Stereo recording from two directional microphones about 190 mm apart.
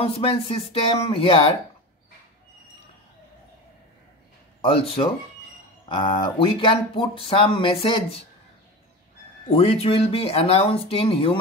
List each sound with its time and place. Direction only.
0.0 s speech: 30° left (ahead or behind)
4.6 s speech: 30° left (ahead or behind)
9.5 s speech: 30° left (ahead or behind)